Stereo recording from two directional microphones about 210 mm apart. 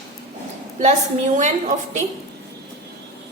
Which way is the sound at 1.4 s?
35° right (ahead or behind).